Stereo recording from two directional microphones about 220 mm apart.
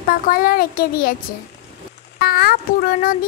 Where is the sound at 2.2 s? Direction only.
45° left (ahead or behind).